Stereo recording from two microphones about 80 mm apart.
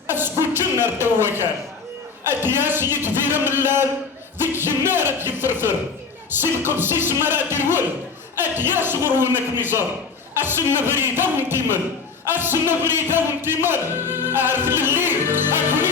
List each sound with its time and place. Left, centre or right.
0.1 s a sound: right
0.5 s speech: right
2.3 s music: right